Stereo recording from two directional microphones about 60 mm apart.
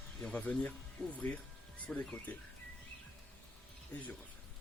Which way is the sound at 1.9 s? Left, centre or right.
Centre.